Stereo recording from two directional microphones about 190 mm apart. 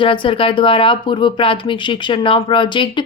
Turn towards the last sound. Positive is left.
turn(degrees=25)  # may be behind; listen again after turning